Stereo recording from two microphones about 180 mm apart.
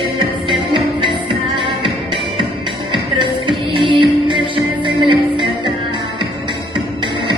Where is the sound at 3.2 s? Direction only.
25° right (ahead or behind).